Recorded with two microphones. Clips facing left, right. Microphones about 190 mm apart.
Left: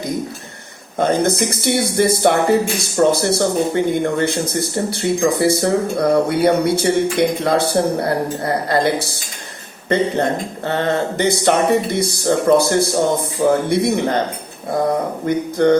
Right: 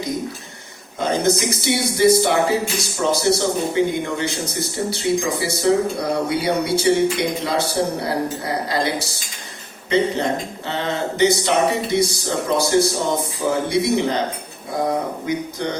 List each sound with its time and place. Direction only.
0.9 s speech: 55° left (ahead or behind)
10.7 s speech: 55° left (ahead or behind)
15.3 s speech: 55° left (ahead or behind)